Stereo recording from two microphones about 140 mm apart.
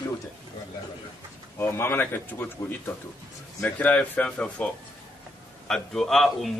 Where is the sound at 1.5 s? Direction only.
15° left (ahead or behind).